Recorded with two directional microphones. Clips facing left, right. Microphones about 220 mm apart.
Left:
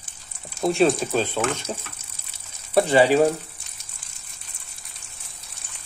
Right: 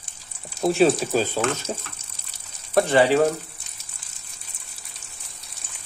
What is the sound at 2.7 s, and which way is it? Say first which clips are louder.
Speech: left 1 dB; 10° left (ahead or behind).